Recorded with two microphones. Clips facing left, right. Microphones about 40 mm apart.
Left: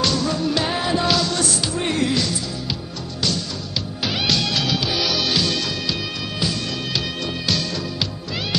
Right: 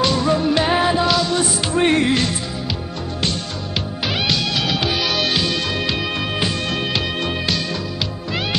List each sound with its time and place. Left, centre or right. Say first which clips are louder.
0.0 s music: right 4 dB; right
0.9 s music: right 3 dB; centre
1.7 s music: right 9 dB; right
4.6 s music: right 2 dB; right
5.4 s music: right 2 dB; right